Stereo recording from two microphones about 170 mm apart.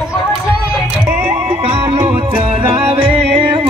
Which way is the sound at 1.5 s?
30° right (ahead or behind).